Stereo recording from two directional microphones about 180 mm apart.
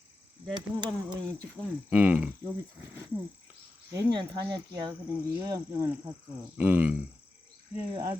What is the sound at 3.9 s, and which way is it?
Cricket, 20° right (ahead or behind).